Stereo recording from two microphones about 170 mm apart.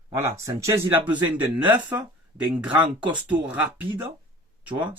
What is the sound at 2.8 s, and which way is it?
Speech, 25° right (ahead or behind).